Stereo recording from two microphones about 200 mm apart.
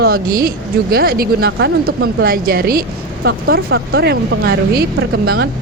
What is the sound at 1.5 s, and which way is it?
A woman's voice, 65° right (ahead or behind).